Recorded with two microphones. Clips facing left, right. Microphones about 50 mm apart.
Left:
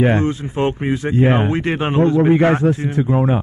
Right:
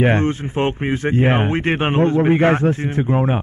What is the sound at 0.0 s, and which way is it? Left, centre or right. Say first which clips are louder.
Speech: left 1 dB; right.